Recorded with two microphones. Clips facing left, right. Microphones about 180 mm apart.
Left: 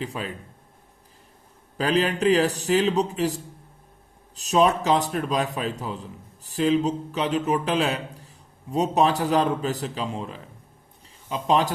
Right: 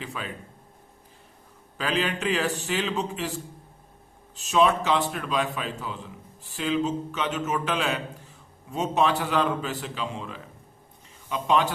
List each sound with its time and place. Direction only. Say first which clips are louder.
0.0 s a man's voice: left 5 dB; 35° left (ahead or behind)
1.8 s a man's voice: left 6 dB; 40° left (ahead or behind)